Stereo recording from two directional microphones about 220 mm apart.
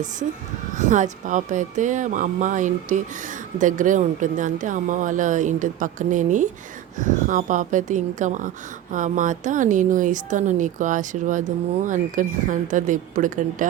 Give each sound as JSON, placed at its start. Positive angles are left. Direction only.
{"t": 0.8, "sound": "speech", "side_deg": -35}